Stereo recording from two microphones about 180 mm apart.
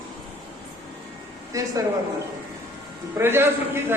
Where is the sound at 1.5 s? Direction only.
20° right (ahead or behind).